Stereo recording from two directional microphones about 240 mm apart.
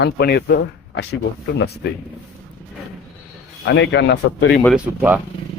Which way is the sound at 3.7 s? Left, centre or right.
Left.